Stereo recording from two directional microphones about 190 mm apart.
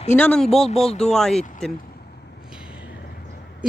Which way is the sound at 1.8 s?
50° left (ahead or behind).